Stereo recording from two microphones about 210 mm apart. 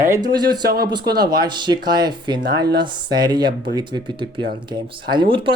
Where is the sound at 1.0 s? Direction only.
50° right (ahead or behind).